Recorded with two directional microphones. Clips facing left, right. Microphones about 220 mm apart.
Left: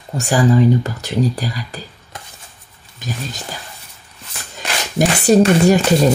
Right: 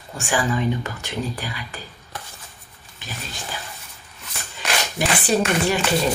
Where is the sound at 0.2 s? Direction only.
35° left (ahead or behind).